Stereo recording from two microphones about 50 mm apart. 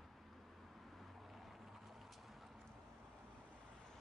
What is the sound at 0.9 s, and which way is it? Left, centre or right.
Vehicle, centre.